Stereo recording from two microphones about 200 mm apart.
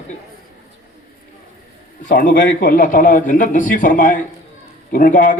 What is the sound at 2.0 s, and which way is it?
A man's voice, 45° left (ahead or behind).